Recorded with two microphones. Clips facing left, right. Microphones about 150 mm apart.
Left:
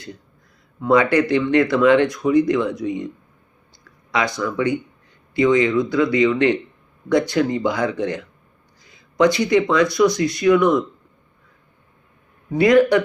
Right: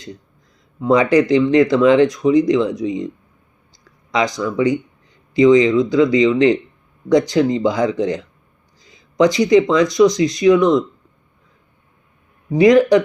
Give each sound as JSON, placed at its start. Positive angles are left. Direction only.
{"t": 0.8, "sound": "speech", "side_deg": -20}
{"t": 4.1, "sound": "speech", "side_deg": -20}
{"t": 12.5, "sound": "speech", "side_deg": -15}